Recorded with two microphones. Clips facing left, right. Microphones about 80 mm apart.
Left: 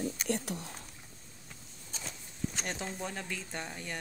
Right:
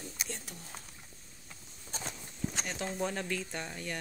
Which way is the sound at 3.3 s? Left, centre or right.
Centre.